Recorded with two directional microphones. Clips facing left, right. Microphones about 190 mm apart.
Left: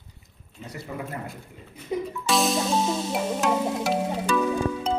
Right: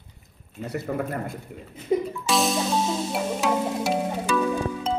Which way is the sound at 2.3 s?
Centre (ahead or behind).